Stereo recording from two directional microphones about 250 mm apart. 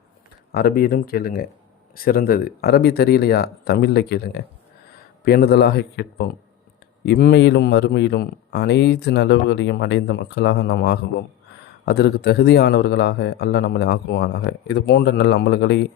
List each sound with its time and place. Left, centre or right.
0.5 s speech: left